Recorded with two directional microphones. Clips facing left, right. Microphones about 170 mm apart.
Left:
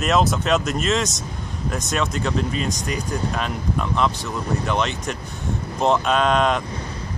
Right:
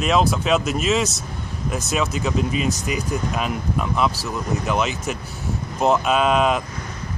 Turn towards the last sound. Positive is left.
turn(degrees=-5)  # may be behind; listen again after turning